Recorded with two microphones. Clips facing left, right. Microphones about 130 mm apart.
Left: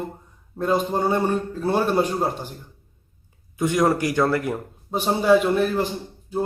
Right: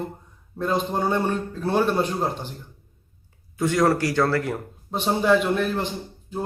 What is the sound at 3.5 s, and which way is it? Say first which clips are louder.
A man's voice: even; 20° left (ahead or behind).